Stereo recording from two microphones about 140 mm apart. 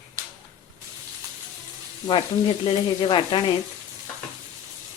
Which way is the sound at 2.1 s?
40° left (ahead or behind).